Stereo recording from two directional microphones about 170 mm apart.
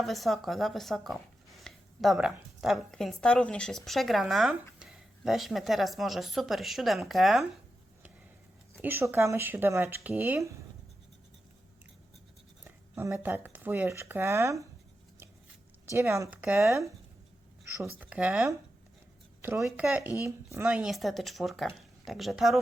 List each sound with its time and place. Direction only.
0.0 s speech: centre (ahead or behind)
8.8 s speech: 15° right (ahead or behind)
12.6 s speech: 15° right (ahead or behind)
15.9 s speech: 15° right (ahead or behind)
18.0 s speech: 5° right (ahead or behind)
20.7 s speech: 5° right (ahead or behind)